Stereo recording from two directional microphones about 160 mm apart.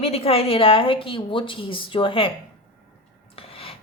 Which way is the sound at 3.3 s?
35° left (ahead or behind).